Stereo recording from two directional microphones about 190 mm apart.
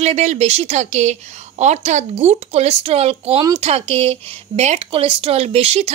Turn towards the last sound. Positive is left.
turn(degrees=-30)  # may be behind; listen again after turning